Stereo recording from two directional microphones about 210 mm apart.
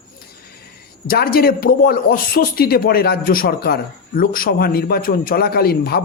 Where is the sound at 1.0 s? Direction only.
45° left (ahead or behind).